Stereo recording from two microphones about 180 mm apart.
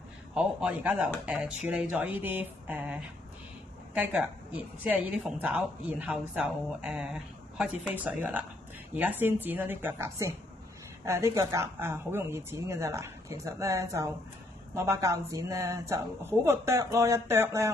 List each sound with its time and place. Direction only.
0.3 s a woman's voice: 5° right (ahead or behind)